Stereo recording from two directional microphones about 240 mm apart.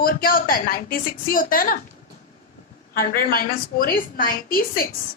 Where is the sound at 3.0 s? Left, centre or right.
Left.